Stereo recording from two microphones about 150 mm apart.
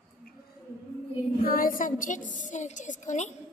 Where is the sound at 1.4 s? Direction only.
70° left (ahead or behind); by 3.3 s 55° left (ahead or behind).